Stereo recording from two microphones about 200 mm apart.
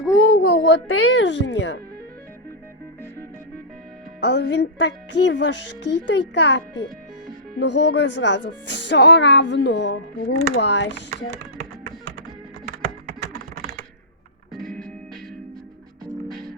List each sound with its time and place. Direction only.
0.3 s speech: 70° left (ahead or behind)
4.2 s speech: 60° left (ahead or behind)
13.3 s typing: 50° right (ahead or behind)
14.5 s music: centre (ahead or behind)